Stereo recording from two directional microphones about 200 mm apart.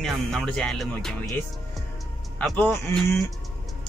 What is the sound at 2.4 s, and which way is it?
Speech, 5° left (ahead or behind).